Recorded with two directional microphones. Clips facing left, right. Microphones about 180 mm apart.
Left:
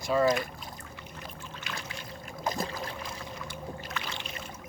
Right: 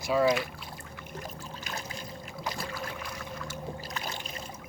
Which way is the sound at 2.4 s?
45° left (ahead or behind).